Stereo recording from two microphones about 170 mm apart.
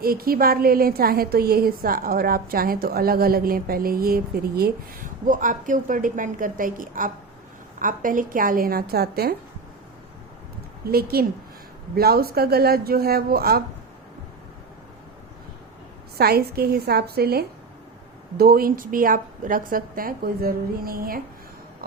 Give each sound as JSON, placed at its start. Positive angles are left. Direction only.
{"t": 0.0, "sound": "a woman's voice", "side_deg": -60}
{"t": 10.8, "sound": "a woman's voice", "side_deg": -65}
{"t": 16.1, "sound": "a woman's voice", "side_deg": -65}